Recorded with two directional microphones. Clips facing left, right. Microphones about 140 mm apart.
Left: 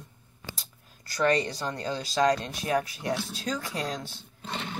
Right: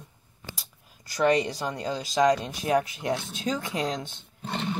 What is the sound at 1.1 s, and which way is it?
Speech, 15° right (ahead or behind).